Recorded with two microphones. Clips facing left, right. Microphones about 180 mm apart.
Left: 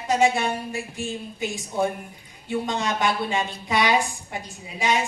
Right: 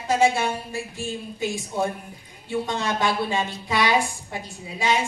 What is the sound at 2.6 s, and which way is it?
A woman's voice, 20° left (ahead or behind).